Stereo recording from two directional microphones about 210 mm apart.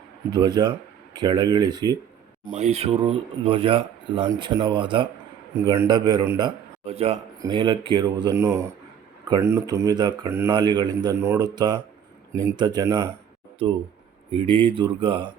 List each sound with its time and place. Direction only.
0.3 s speech: 20° right (ahead or behind)
2.4 s speech: 35° right (ahead or behind); by 13.1 s 15° right (ahead or behind)
14.3 s speech: 25° right (ahead or behind)